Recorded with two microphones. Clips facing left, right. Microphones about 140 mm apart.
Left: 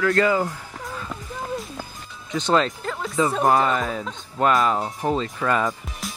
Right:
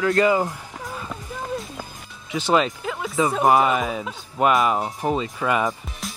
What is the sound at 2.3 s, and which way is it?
Speech, 10° right (ahead or behind).